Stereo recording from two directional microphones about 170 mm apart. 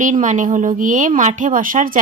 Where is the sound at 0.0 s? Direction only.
50° right (ahead or behind).